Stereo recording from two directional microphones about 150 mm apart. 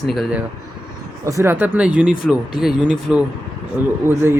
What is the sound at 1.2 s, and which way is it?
Speech, 20° right (ahead or behind).